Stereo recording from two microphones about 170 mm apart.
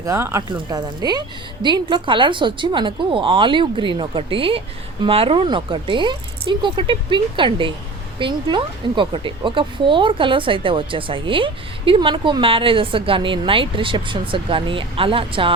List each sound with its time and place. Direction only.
0.0 s speech: 15° right (ahead or behind); by 15.5 s 30° right (ahead or behind)